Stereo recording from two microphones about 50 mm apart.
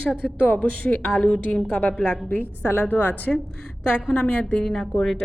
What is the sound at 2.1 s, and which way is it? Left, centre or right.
A woman's voice, left.